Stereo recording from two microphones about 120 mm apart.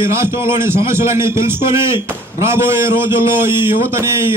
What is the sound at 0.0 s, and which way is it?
A man's voice, 20° right (ahead or behind).